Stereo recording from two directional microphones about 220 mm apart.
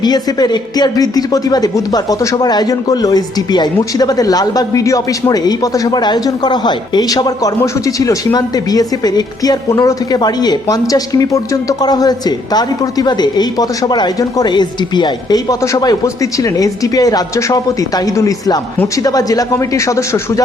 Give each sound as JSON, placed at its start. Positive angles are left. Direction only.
{"t": 0.0, "sound": "speech", "side_deg": 20}